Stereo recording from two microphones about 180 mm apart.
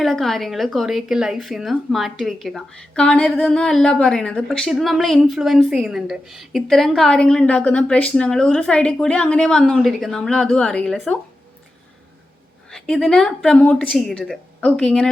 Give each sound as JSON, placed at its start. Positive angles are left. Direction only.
{"t": 0.0, "sound": "speech", "side_deg": 0}
{"t": 12.7, "sound": "speech", "side_deg": 0}